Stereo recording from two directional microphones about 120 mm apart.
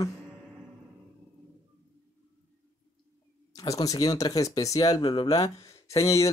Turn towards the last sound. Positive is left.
turn(degrees=25)  # may be behind; listen again after turning